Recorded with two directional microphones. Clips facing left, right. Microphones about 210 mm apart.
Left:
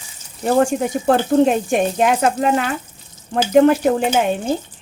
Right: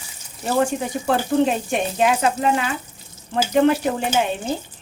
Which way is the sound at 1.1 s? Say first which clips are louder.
Left 4 dB; 45° left (ahead or behind).